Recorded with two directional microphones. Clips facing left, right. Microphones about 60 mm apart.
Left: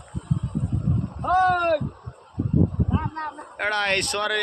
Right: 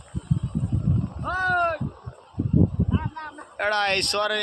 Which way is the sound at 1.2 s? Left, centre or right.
Left.